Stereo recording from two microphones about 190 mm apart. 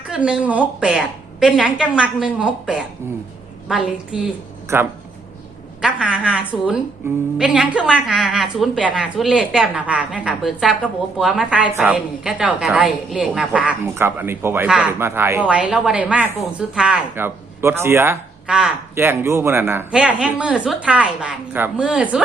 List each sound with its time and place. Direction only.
0.1 s a woman's voice: 5° right (ahead or behind)